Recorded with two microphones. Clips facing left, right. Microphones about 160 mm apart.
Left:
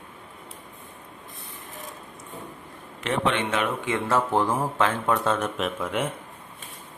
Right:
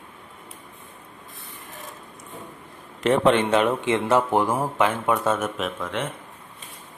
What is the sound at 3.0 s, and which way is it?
Speech, 40° right (ahead or behind).